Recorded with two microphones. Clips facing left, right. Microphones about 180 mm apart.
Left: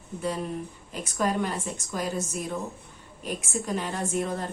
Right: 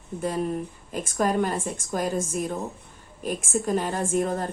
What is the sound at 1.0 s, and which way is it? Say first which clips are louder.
A woman's voice: right 3 dB; 50° right (ahead or behind).